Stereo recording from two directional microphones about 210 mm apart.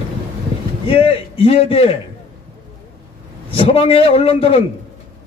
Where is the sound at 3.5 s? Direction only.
30° left (ahead or behind).